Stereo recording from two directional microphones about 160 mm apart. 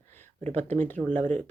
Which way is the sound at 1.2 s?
50° right (ahead or behind).